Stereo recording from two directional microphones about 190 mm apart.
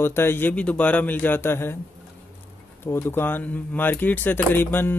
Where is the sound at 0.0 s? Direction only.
10° left (ahead or behind).